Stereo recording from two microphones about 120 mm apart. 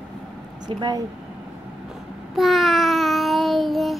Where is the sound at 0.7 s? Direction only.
35° right (ahead or behind).